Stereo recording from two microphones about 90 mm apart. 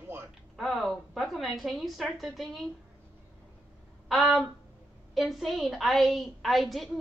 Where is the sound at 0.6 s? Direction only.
Centre (ahead or behind).